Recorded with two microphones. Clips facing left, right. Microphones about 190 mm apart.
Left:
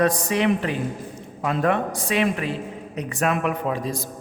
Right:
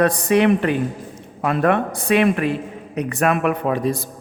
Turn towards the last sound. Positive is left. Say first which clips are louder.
# right 5 dB
turn(degrees=-60)  # may be behind; listen again after turning